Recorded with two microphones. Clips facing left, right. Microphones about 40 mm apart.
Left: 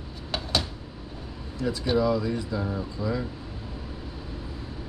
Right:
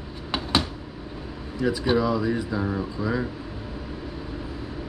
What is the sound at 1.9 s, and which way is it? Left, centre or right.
Speech, centre.